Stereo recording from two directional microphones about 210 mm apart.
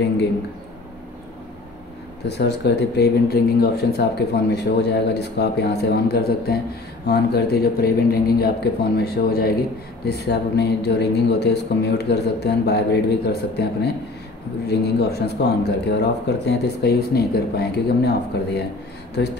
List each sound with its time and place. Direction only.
2.2 s speech: 50° left (ahead or behind)